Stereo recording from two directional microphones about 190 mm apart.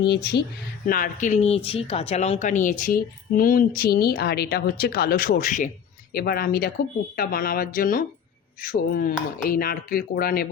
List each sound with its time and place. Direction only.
0.0 s speech: 60° left (ahead or behind)
0.9 s speech: 50° left (ahead or behind)
6.1 s speech: 55° left (ahead or behind)